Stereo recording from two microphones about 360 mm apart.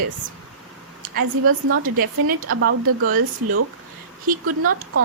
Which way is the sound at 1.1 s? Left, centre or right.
Right.